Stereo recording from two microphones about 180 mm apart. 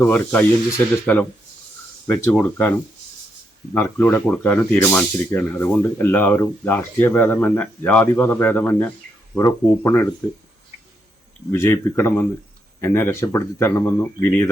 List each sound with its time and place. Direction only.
0.0 s speech: 10° left (ahead or behind)
3.8 s speech: 15° left (ahead or behind)
11.5 s speech: 15° left (ahead or behind)